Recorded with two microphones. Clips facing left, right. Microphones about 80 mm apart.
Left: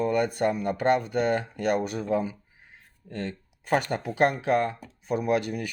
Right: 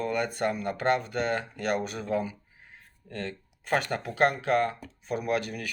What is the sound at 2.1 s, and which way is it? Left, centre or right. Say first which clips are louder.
Speech: left 2 dB; centre.